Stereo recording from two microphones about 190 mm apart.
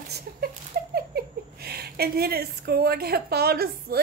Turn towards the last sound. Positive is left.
turn(degrees=-55)  # may be behind; listen again after turning